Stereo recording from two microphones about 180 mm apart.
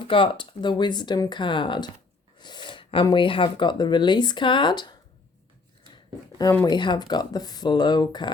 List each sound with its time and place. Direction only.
0.0 s speech: 30° left (ahead or behind)
6.7 s speech: 25° left (ahead or behind)